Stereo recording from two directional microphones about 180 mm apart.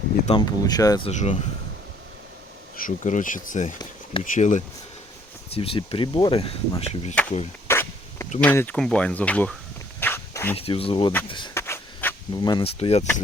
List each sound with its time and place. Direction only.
0.3 s speech: 25° left (ahead or behind)
1.0 s speech: 40° left (ahead or behind)
2.7 s speech: 45° left (ahead or behind)
5.5 s speech: 30° left (ahead or behind)
7.7 s a sound: 15° left (ahead or behind)
8.4 s speech: 10° left (ahead or behind)
10.0 s a sound: 10° left (ahead or behind)
10.6 s speech: 30° left (ahead or behind)
11.5 s a sound: 15° left (ahead or behind)
12.3 s speech: 25° left (ahead or behind)